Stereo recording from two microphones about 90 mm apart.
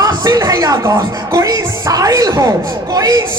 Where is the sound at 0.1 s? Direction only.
45° right (ahead or behind).